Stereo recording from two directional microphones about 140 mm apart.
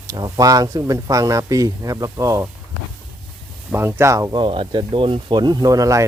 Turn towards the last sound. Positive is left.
turn(degrees=-25)  # may be behind; listen again after turning